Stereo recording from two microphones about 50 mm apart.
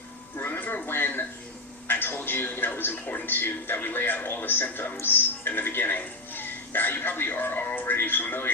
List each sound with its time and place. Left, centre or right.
0.3 s music: left
0.6 s a sound: left
1.9 s television: left
3.2 s speech: left